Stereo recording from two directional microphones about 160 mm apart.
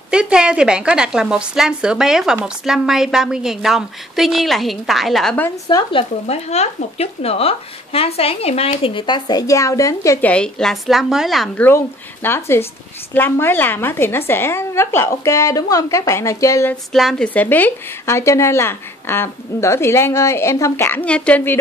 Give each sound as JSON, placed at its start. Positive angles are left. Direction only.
{"t": 0.1, "sound": "a woman's voice", "side_deg": -5}
{"t": 5.7, "sound": "speech", "side_deg": 30}
{"t": 10.2, "sound": "a woman's voice", "side_deg": 5}
{"t": 16.9, "sound": "a woman's voice", "side_deg": 0}